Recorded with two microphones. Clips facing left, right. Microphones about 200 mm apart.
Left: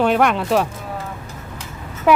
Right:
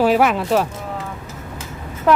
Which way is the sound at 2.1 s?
10° left (ahead or behind).